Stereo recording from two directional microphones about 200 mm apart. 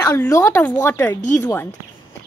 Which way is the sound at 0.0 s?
15° left (ahead or behind).